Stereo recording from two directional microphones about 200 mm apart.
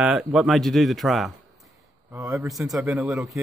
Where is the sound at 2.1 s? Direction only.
15° right (ahead or behind).